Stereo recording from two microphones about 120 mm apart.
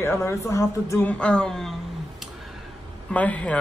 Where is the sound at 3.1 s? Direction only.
10° left (ahead or behind).